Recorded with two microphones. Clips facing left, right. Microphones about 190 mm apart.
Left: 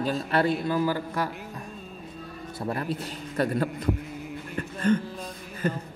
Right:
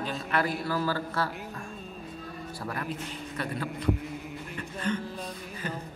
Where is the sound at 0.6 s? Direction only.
15° left (ahead or behind).